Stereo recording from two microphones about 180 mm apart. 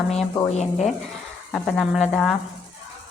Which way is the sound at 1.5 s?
5° left (ahead or behind).